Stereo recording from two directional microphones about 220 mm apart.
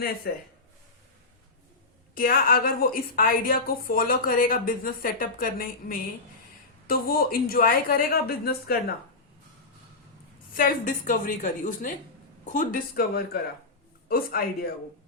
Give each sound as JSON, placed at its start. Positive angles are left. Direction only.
{"t": 0.3, "sound": "a woman's voice", "side_deg": 45}
{"t": 2.1, "sound": "a woman's voice", "side_deg": 40}
{"t": 10.5, "sound": "a woman's voice", "side_deg": 40}